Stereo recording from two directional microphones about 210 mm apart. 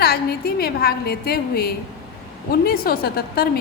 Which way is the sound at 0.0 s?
50° left (ahead or behind).